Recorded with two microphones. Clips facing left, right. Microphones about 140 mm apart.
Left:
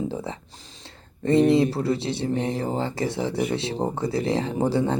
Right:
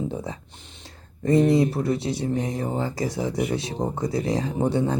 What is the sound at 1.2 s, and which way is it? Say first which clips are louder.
Speech: left 1 dB; 25° left (ahead or behind).